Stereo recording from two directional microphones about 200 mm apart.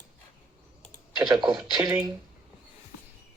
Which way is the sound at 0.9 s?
20° right (ahead or behind).